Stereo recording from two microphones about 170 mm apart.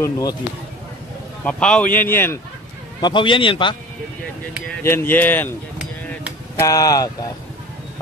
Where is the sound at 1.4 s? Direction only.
5° left (ahead or behind).